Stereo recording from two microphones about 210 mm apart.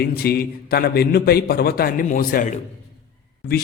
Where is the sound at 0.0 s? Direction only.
50° left (ahead or behind).